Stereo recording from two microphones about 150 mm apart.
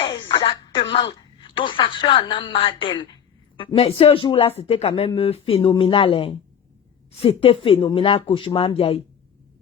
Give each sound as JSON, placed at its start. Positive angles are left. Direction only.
{"t": 0.3, "sound": "music", "side_deg": 30}
{"t": 0.8, "sound": "speech", "side_deg": 35}